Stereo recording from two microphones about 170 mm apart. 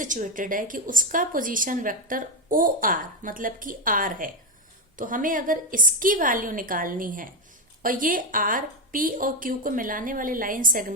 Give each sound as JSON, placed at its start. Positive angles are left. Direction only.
{"t": 0.0, "sound": "speech", "side_deg": -50}